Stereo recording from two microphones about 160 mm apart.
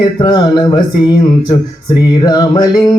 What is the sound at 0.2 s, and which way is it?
Music, 30° left (ahead or behind).